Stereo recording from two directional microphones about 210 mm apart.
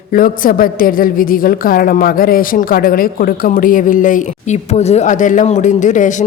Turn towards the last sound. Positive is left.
turn(degrees=35)  # may be behind; listen again after turning